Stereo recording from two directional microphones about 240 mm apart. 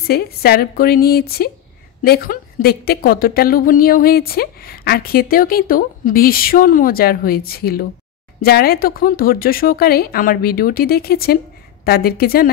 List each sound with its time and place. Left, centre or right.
0.0 s a woman's voice: left